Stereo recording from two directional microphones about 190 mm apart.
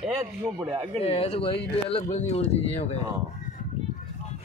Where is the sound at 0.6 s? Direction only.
30° right (ahead or behind).